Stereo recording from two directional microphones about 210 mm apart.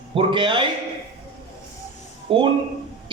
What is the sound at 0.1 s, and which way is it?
Speech, 25° right (ahead or behind).